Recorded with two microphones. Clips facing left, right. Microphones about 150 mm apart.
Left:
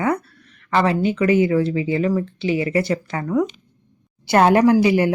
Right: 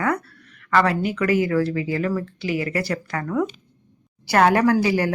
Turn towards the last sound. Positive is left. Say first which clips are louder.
# left 4 dB
turn(degrees=20)  # may be behind; listen again after turning